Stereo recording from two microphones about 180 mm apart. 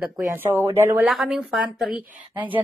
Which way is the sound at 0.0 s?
10° right (ahead or behind).